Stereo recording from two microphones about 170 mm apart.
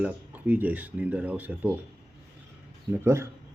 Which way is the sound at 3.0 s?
15° right (ahead or behind).